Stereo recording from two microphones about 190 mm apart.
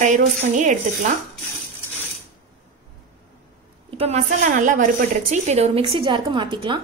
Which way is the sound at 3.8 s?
35° right (ahead or behind).